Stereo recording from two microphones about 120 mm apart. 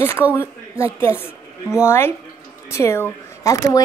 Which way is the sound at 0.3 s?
20° left (ahead or behind).